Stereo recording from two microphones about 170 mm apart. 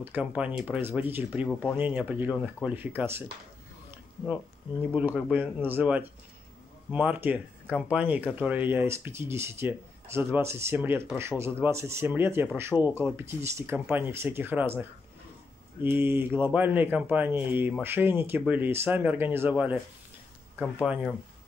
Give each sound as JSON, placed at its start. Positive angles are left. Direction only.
{"t": 0.0, "sound": "speech", "side_deg": -10}
{"t": 1.5, "sound": "speech", "side_deg": 5}
{"t": 1.8, "sound": "speech", "side_deg": -10}
{"t": 4.9, "sound": "speech", "side_deg": -10}